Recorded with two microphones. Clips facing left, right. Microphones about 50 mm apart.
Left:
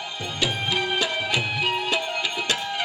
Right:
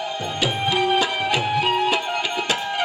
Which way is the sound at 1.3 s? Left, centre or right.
Right.